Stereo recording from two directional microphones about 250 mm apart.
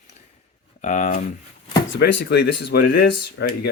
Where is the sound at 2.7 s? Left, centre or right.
Left.